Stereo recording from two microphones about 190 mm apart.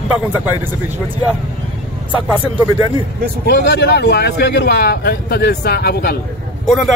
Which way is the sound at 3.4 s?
60° left (ahead or behind).